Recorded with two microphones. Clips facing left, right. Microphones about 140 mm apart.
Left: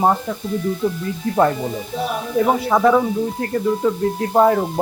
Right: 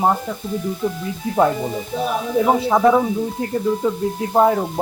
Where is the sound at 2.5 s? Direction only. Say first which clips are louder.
Right 1 dB; 15° right (ahead or behind).